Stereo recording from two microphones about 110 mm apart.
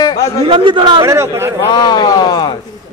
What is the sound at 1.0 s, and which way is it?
Speech, 25° right (ahead or behind).